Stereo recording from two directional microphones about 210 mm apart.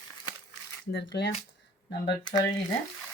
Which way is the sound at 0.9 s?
55° left (ahead or behind).